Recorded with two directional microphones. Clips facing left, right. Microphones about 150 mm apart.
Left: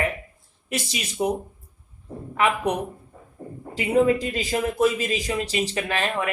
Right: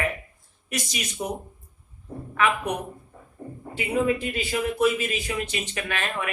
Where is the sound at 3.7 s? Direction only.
40° left (ahead or behind).